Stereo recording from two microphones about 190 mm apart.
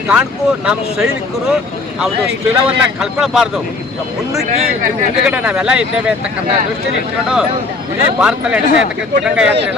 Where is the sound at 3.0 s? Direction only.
5° right (ahead or behind).